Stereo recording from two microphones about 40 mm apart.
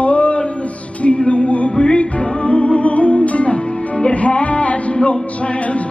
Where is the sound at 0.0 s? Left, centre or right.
Left.